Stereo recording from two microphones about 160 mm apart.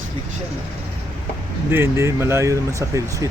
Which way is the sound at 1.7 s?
15° right (ahead or behind).